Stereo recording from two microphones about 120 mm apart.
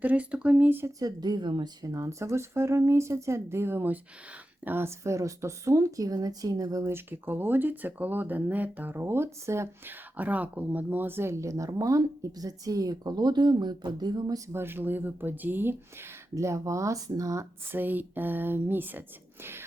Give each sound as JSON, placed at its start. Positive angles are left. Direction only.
{"t": 0.0, "sound": "speech", "side_deg": -10}
{"t": 0.9, "sound": "speech", "side_deg": -35}
{"t": 14.5, "sound": "speech", "side_deg": -20}
{"t": 16.3, "sound": "speech", "side_deg": -25}
{"t": 17.7, "sound": "speech", "side_deg": -15}